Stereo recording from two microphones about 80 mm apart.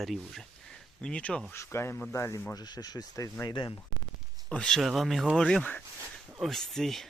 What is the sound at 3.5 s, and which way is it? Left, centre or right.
Speech, left.